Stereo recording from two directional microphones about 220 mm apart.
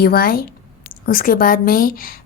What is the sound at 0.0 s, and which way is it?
A woman's voice, 45° left (ahead or behind).